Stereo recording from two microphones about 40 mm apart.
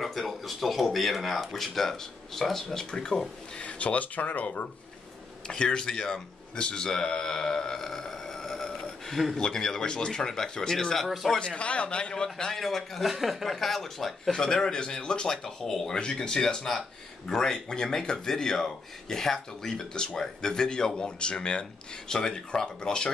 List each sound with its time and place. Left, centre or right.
0.0 s speech: centre
3.5 s speech: left
5.5 s speech: centre
9.1 s speech: centre
9.4 s speech: centre
11.0 s speech: centre
11.3 s a man's voice: left
12.5 s speech: centre
14.3 s a man's voice: centre
15.3 s speech: centre